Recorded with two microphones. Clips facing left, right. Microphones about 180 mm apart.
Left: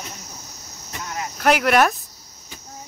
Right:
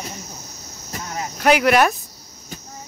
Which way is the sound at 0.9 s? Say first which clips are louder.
Right 1 dB; 30° right (ahead or behind).